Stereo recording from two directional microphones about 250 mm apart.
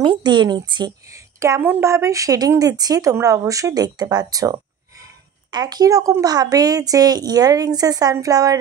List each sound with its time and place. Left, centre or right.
0.0 s a woman's voice: centre